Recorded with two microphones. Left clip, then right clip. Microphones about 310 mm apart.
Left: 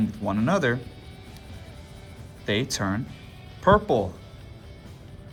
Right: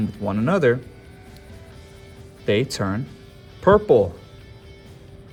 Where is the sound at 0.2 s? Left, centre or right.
Right.